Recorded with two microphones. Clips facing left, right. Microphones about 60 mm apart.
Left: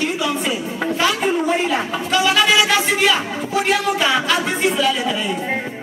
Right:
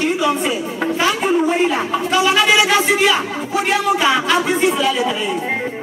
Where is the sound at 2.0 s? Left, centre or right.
Right.